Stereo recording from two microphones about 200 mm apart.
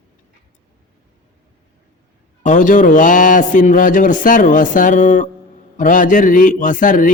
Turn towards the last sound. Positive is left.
turn(degrees=40)  # may be behind; listen again after turning